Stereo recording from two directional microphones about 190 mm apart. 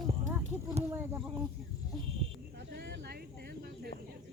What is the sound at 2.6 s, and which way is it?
Cricket, 60° right (ahead or behind).